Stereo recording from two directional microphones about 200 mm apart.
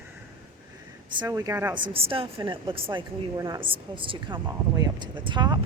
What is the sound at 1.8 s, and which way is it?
A woman's voice, 25° right (ahead or behind).